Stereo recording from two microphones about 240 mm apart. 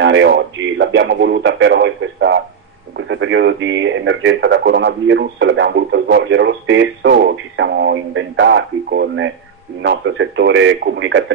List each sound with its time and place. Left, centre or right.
0.0 s speech: right